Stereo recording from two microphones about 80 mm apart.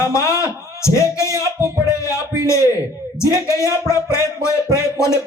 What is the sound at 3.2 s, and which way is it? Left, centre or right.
Speech, left.